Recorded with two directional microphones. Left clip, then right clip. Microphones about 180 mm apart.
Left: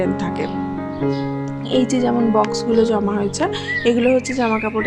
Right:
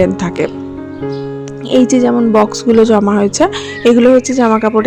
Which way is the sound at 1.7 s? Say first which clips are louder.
Right 8 dB; 35° right (ahead or behind).